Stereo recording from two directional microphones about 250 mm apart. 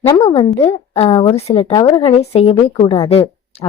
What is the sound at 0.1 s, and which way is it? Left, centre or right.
A woman's voice, centre.